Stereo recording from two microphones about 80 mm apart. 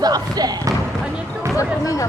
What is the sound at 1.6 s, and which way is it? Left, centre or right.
Speech, left.